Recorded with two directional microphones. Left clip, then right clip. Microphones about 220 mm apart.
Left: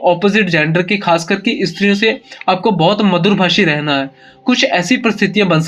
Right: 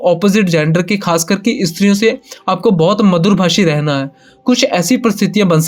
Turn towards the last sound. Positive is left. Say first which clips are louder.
# even
turn(degrees=-55)  # may be behind; listen again after turning